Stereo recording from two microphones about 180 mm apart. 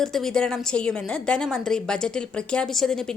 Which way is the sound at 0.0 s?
Centre (ahead or behind).